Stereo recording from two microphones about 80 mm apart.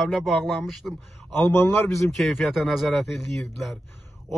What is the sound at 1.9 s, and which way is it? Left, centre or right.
Speech, centre.